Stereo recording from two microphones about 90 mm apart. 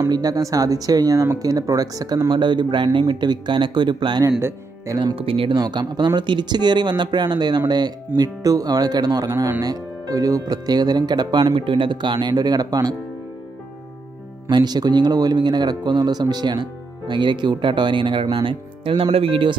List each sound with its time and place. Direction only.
0.1 s speech: 45° right (ahead or behind)
2.2 s a man's voice: 60° right (ahead or behind)
4.4 s speech: 30° right (ahead or behind)
5.1 s speech: 90° right
5.6 s speech: 55° right (ahead or behind)
8.2 s speech: 40° right (ahead or behind)
9.3 s speech: 35° right (ahead or behind); by 11.4 s 50° right (ahead or behind)
11.5 s speech: 70° right (ahead or behind); by 12.9 s 45° right (ahead or behind)
14.5 s a man's voice: 50° right (ahead or behind); by 19.5 s 85° right